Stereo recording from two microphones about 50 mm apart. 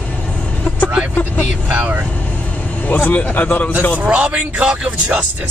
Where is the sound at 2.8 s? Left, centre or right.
Left.